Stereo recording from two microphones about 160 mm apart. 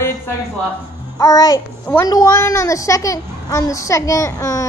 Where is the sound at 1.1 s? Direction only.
20° left (ahead or behind).